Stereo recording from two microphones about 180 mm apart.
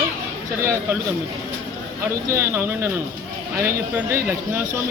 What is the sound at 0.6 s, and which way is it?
Speech, 15° right (ahead or behind).